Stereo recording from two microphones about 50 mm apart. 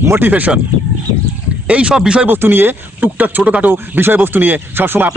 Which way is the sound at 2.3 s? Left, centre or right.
Right.